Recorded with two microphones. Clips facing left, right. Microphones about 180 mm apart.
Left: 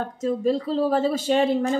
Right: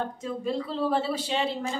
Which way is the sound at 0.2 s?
40° left (ahead or behind).